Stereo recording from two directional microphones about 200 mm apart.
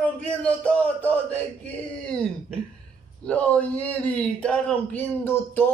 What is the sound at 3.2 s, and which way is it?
Speech, 5° left (ahead or behind).